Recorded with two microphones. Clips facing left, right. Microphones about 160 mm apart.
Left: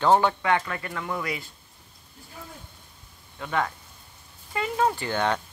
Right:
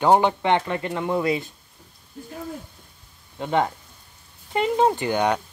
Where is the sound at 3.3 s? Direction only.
25° right (ahead or behind).